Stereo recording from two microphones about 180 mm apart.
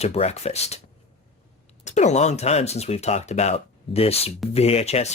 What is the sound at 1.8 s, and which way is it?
Speech, 40° left (ahead or behind).